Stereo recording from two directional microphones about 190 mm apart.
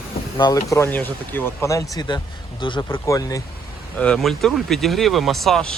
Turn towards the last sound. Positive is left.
turn(degrees=0)  # may be behind; listen again after turning